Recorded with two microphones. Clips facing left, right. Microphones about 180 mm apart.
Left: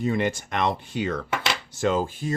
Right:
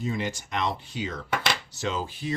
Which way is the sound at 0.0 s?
60° left (ahead or behind).